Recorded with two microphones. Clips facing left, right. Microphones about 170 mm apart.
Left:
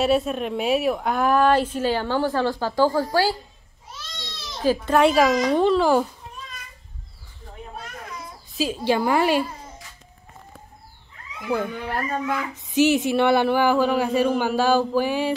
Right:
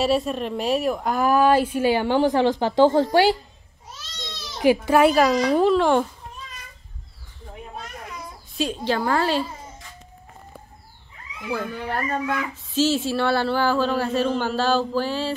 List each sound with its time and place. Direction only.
0.0 s a woman's voice: centre (ahead or behind); by 3.3 s 20° right (ahead or behind)
4.6 s a child's voice: 10° right (ahead or behind)
8.5 s a man's voice: 5° left (ahead or behind)
11.5 s a man's voice: 15° left (ahead or behind)